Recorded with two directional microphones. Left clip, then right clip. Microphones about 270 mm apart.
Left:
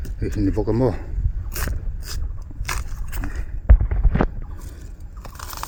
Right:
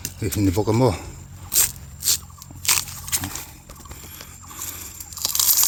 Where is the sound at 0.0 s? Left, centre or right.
Centre.